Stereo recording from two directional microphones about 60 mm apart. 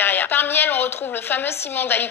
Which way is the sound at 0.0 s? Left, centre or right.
Left.